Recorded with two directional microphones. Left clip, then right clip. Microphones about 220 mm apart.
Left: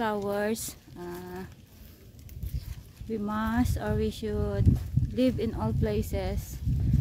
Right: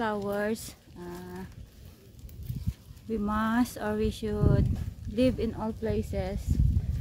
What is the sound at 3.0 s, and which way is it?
Speech, 5° right (ahead or behind).